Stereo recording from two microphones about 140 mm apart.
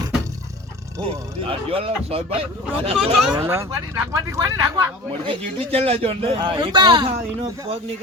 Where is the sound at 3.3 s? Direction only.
20° right (ahead or behind).